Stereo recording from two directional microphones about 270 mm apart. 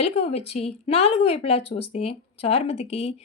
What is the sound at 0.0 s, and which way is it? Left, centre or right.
Speech, left.